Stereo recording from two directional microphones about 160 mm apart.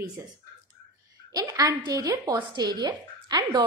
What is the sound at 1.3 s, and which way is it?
A woman's voice, 20° right (ahead or behind).